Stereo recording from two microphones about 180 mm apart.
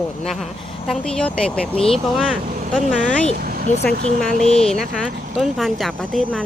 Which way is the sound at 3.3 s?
55° right (ahead or behind).